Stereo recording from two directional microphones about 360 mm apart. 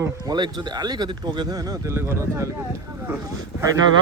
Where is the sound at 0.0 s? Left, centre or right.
Centre.